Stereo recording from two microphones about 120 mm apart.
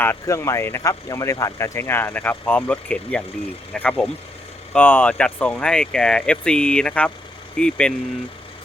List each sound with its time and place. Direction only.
0.0 s speech: 20° left (ahead or behind)